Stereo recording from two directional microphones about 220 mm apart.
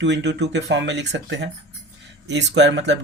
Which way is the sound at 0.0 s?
50° right (ahead or behind).